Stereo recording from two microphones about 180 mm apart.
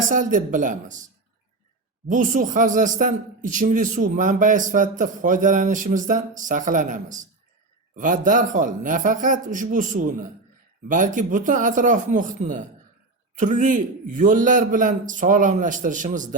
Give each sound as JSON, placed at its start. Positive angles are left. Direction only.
{"t": 0.1, "sound": "a man's voice", "side_deg": -45}
{"t": 2.0, "sound": "a man's voice", "side_deg": -45}